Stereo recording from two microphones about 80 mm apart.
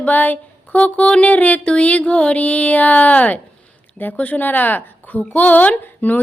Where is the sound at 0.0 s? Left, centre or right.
Left.